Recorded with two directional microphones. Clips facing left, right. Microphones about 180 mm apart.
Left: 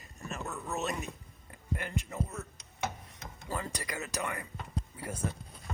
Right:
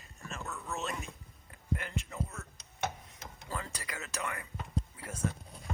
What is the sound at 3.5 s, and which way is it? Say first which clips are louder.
Speech: left 3 dB; 40° left (ahead or behind).